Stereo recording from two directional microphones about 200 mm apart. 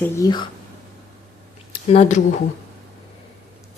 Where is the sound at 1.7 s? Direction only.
30° left (ahead or behind).